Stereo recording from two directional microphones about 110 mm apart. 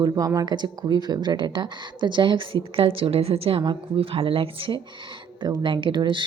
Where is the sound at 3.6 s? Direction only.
50° right (ahead or behind).